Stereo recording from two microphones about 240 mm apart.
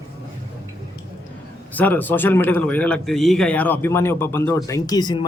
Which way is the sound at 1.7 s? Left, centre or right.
Centre.